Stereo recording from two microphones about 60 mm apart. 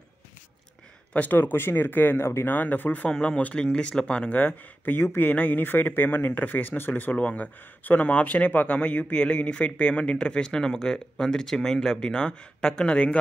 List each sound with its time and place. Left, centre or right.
1.1 s speech: left
2.5 s speech: left
3.1 s speech: centre
4.4 s speech: left
7.2 s speech: left